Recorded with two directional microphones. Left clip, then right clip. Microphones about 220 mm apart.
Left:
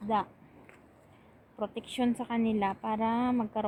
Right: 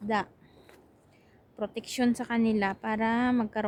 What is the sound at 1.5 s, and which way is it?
A woman's voice, 10° right (ahead or behind).